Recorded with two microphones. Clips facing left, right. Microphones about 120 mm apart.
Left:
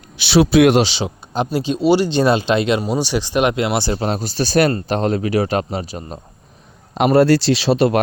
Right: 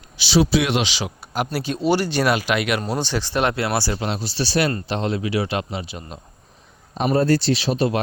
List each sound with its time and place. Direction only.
0.2 s speech: 60° left (ahead or behind)
0.8 s speech: 30° left (ahead or behind)
2.8 s speech: 10° left (ahead or behind)
4.0 s speech: 45° left (ahead or behind)
6.9 s speech: 80° left